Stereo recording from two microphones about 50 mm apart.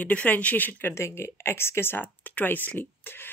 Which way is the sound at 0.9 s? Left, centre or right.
Left.